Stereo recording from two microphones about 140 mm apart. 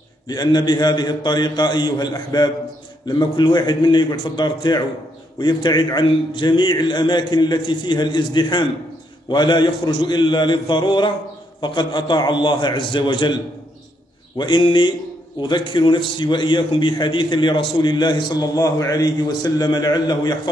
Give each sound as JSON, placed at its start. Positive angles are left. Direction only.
{"t": 0.3, "sound": "a man's voice", "side_deg": 30}